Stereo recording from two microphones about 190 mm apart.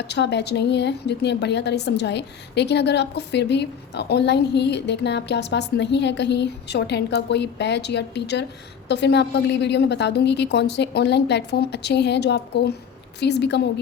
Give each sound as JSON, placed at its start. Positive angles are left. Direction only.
{"t": 0.1, "sound": "a woman's voice", "side_deg": 65}